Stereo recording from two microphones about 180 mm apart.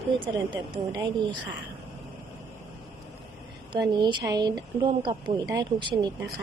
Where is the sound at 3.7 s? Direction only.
25° right (ahead or behind).